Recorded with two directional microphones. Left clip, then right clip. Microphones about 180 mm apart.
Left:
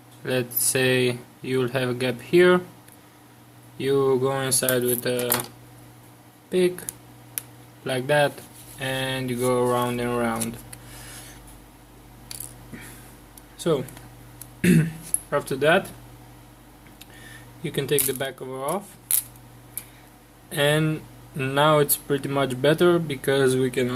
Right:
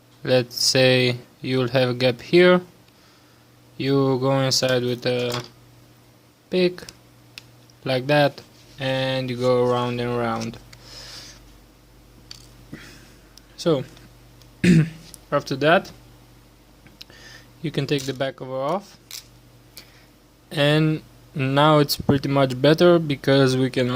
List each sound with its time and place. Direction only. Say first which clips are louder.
0.2 s speech: right 7 dB; 45° right (ahead or behind)
3.8 s speech: even; 50° right (ahead or behind)
6.5 s speech: right 1 dB; 50° right (ahead or behind)
7.9 s speech: right 2 dB; 45° right (ahead or behind)
10.9 s a sound: right 6 dB; 45° right (ahead or behind)
13.6 s speech: right 2 dB; 45° right (ahead or behind)
17.6 s speech: even; 50° right (ahead or behind)
20.5 s speech: right 2 dB; 45° right (ahead or behind)